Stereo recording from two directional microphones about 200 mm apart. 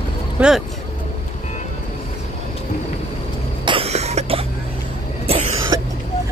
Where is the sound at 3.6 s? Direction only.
25° right (ahead or behind).